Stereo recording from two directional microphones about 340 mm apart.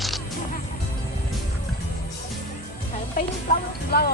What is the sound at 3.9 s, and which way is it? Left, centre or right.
Speech, left.